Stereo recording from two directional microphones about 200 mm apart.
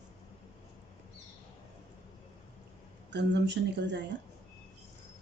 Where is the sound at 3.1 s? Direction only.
60° right (ahead or behind).